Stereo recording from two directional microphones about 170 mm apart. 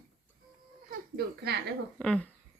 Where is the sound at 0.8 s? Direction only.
60° right (ahead or behind).